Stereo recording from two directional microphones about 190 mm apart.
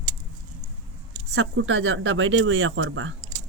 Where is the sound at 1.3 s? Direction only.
80° right.